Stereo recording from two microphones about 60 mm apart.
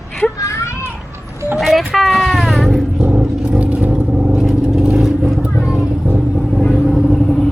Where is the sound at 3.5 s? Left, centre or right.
Right.